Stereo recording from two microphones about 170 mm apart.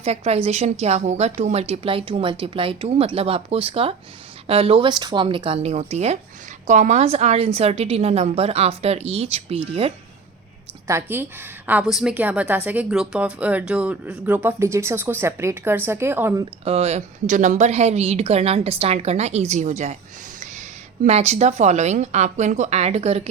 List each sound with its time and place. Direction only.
0.0 s a woman's voice: 40° right (ahead or behind)
10.8 s a woman's voice: 15° right (ahead or behind)
16.6 s a woman's voice: 40° right (ahead or behind)